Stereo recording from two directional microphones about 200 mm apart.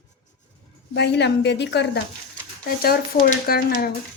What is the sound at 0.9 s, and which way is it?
A woman's voice, 60° left (ahead or behind).